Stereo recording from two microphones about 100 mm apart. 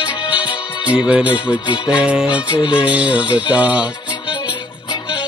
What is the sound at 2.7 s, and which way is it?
Music, 10° right (ahead or behind).